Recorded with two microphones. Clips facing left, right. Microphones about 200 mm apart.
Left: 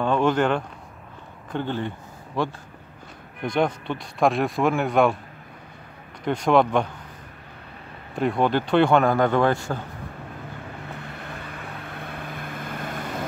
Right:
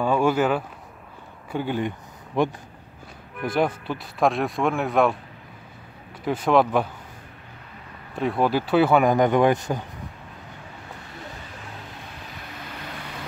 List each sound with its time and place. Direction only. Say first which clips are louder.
0.0 s speech: even; 10° right (ahead or behind)
3.4 s speech: even; 5° right (ahead or behind)
6.2 s speech: even; 5° right (ahead or behind)
8.2 s speech: left 1 dB; centre (ahead or behind)
9.0 s speech: right 2 dB; 15° right (ahead or behind)
11.4 s vehicle: left 3 dB; 60° left (ahead or behind)